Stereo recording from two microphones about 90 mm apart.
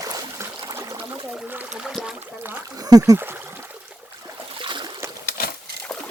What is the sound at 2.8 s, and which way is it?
Speech, 45° right (ahead or behind).